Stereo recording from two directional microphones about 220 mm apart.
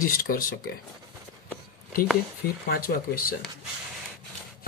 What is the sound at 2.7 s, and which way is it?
Speech, 40° left (ahead or behind).